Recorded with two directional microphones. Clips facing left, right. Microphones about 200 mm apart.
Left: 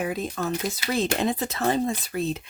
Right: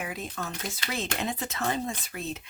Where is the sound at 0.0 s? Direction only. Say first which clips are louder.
Left 8 dB; 35° left (ahead or behind).